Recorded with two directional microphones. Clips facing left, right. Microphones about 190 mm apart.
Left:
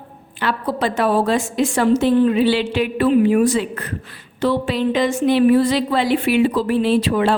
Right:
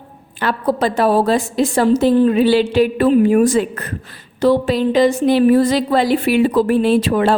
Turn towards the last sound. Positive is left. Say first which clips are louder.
# right 2 dB
turn(degrees=-45)  # may be behind; listen again after turning